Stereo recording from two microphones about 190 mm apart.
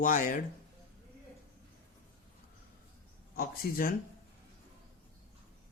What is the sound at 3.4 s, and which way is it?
Speech, 50° left (ahead or behind).